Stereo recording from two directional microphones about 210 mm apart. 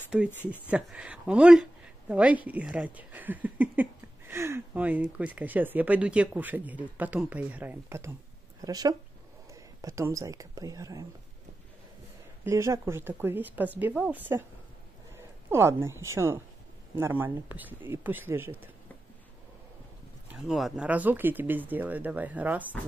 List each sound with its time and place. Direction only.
0.1 s speech: 5° right (ahead or behind)
12.4 s speech: 15° right (ahead or behind)
20.2 s speech: centre (ahead or behind)